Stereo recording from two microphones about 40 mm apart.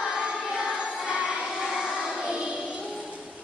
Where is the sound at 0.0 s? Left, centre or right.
Centre.